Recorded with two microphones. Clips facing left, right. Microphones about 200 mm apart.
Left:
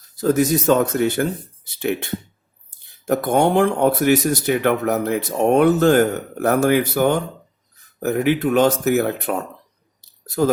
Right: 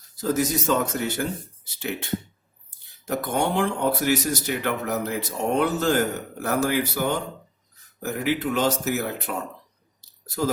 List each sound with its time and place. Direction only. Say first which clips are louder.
0.2 s speech: left 7 dB; 55° left (ahead or behind)
3.1 s speech: left 8 dB; 55° left (ahead or behind)